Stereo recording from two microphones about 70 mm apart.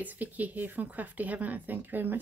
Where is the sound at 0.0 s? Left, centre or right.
Right.